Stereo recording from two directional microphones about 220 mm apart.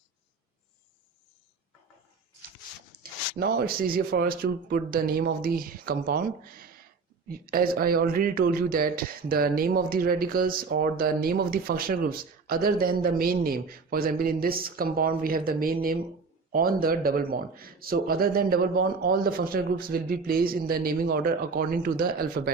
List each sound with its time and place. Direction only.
3.3 s speech: 40° right (ahead or behind)